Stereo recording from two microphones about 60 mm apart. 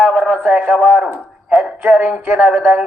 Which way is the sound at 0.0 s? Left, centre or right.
Centre.